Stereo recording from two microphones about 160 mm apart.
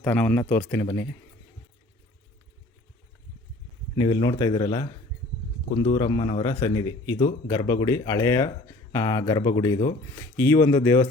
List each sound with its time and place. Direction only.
0.0 s speech: 10° left (ahead or behind)
3.9 s a man's voice: 25° left (ahead or behind)